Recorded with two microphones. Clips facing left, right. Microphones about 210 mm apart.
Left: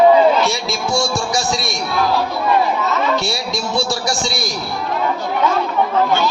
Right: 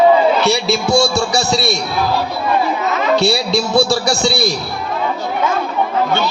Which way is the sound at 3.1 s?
65° right (ahead or behind).